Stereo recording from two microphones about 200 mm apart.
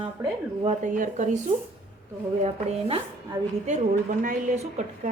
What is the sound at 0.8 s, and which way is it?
Speech, 40° right (ahead or behind).